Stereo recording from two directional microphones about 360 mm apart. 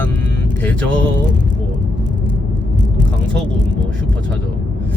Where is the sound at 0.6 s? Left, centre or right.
Centre.